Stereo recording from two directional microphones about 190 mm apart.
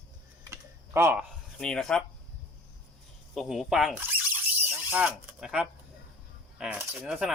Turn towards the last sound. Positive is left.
turn(degrees=-5)  # may be behind; listen again after turning